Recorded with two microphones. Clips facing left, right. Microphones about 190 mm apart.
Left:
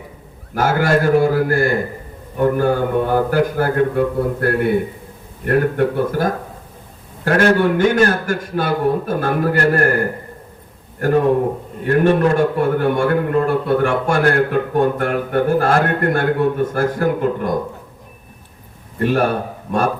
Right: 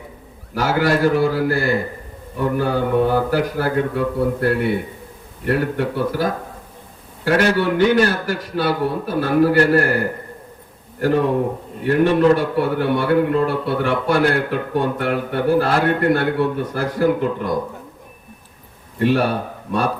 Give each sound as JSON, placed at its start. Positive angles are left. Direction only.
{"t": 0.5, "sound": "a man's voice", "side_deg": 50}
{"t": 11.8, "sound": "a man's voice", "side_deg": 50}
{"t": 19.0, "sound": "a man's voice", "side_deg": 50}